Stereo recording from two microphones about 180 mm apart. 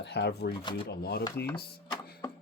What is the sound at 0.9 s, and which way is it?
Speech, 65° left (ahead or behind).